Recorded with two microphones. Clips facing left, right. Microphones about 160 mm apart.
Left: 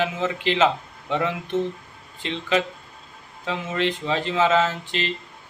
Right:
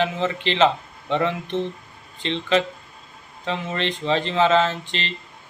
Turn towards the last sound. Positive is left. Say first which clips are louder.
# left 1 dB
turn(degrees=10)  # may be behind; listen again after turning